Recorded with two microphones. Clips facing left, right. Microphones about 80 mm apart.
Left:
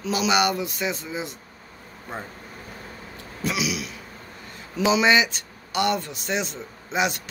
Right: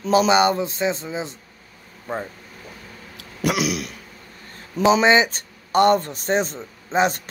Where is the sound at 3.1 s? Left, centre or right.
Right.